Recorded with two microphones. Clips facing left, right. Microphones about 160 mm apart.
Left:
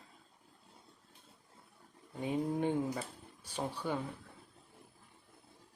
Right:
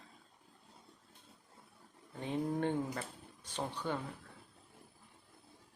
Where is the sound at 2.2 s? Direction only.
10° left (ahead or behind).